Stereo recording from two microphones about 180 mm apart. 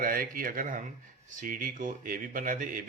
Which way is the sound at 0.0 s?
55° right (ahead or behind).